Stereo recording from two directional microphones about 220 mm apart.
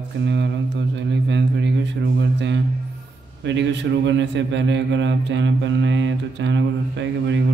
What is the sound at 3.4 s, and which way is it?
Mantra, 55° right (ahead or behind).